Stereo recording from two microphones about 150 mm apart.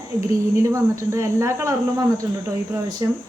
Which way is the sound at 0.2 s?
20° right (ahead or behind).